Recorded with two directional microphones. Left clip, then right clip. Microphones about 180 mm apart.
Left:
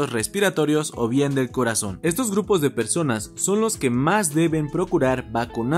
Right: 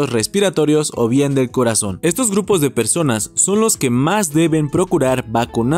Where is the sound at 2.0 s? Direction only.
40° right (ahead or behind).